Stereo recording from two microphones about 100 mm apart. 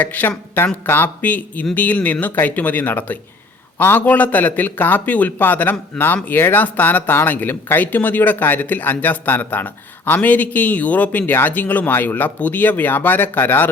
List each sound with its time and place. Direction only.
0.0 s speech: 15° left (ahead or behind)